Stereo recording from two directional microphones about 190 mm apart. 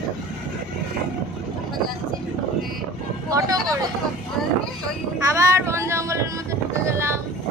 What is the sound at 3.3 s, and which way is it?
Vehicle, 20° right (ahead or behind).